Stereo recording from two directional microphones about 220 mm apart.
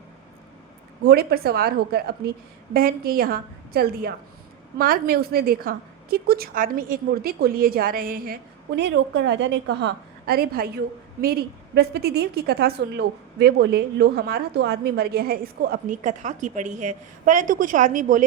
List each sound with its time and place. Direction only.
1.0 s a woman's voice: 45° right (ahead or behind)